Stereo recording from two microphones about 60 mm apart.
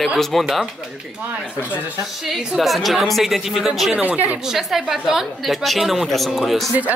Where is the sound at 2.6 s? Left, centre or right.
Centre.